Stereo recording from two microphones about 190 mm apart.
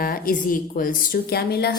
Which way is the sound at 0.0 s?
50° left (ahead or behind).